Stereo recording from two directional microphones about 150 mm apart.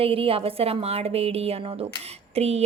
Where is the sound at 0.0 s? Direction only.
40° right (ahead or behind).